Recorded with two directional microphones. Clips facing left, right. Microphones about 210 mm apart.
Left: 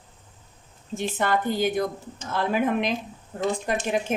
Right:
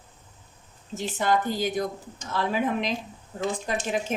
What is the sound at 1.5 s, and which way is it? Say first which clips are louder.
A woman's voice: left 3 dB; 55° left (ahead or behind).